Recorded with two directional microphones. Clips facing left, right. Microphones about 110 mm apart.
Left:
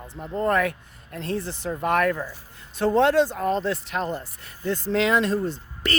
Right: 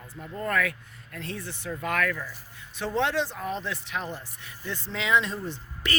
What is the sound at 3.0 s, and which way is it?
Speech, 45° left (ahead or behind).